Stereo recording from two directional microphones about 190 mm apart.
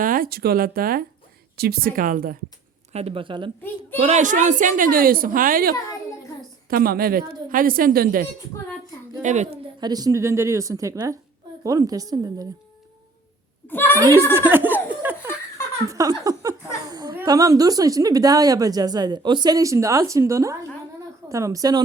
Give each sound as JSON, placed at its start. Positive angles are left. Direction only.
{"t": 0.0, "sound": "a woman's voice", "side_deg": -45}
{"t": 2.9, "sound": "a woman's voice", "side_deg": -30}
{"t": 9.2, "sound": "a woman's voice", "side_deg": -40}
{"t": 9.8, "sound": "speech", "side_deg": -20}
{"t": 13.7, "sound": "a sound", "side_deg": 10}
{"t": 14.3, "sound": "laughter", "side_deg": -10}
{"t": 15.9, "sound": "speech", "side_deg": -15}